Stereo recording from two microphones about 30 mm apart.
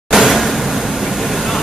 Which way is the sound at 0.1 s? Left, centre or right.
Centre.